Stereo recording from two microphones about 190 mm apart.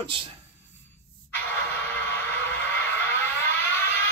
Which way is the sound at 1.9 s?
10° left (ahead or behind).